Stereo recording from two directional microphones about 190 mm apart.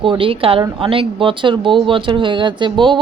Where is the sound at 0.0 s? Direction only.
25° right (ahead or behind).